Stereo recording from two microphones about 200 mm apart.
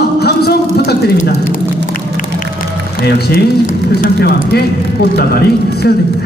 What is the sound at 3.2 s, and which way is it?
A man's voice, 45° left (ahead or behind).